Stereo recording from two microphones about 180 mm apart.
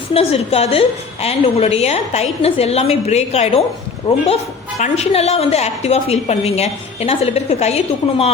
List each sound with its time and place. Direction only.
0.1 s a woman's voice: 35° left (ahead or behind)
4.8 s a woman's voice: 35° left (ahead or behind)